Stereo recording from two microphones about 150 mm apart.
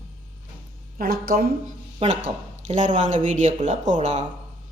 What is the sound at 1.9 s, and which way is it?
Speech, 50° right (ahead or behind).